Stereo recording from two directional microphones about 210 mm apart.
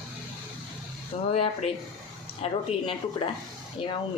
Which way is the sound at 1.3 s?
30° left (ahead or behind).